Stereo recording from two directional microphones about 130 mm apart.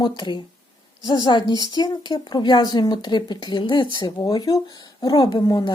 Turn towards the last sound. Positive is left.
turn(degrees=35)  # may be behind; listen again after turning